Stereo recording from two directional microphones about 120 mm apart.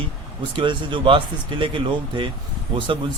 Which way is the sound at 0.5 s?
40° right (ahead or behind).